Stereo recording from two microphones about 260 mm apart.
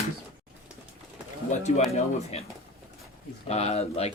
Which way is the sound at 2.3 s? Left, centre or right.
Left.